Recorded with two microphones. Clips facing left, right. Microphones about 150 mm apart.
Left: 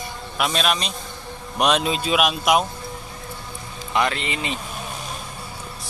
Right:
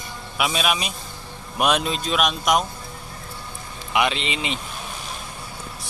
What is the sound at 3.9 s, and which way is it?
Speech, 15° right (ahead or behind).